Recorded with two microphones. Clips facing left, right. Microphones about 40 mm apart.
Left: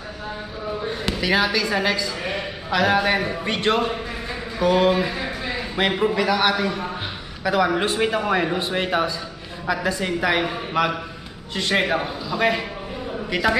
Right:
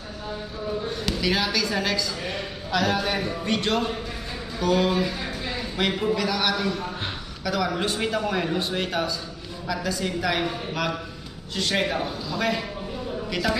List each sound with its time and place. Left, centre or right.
0.8 s a man's voice: left